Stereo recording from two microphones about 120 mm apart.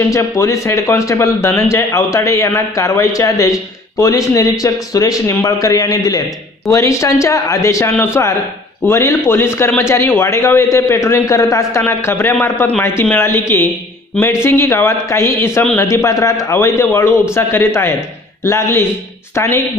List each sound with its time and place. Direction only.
0.1 s a man's voice: 25° left (ahead or behind)